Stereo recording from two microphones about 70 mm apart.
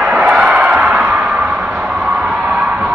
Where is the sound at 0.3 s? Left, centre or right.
Centre.